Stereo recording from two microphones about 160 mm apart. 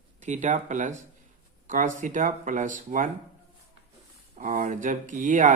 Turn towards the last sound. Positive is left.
turn(degrees=-55)  # may be behind; listen again after turning